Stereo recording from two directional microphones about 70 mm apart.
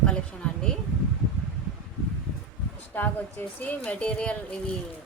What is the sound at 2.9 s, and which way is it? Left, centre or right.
Speech, left.